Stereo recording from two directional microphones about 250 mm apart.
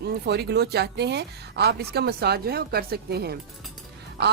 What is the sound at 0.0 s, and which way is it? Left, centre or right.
Speech, right.